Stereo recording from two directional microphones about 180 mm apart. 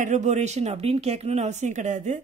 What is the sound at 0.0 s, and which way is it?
Speech, 40° right (ahead or behind).